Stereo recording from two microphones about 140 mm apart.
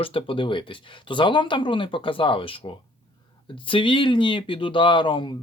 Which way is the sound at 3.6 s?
35° left (ahead or behind).